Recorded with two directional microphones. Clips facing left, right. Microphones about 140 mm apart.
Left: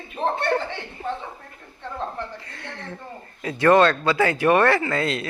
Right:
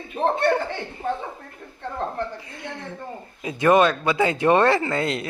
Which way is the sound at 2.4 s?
15° right (ahead or behind).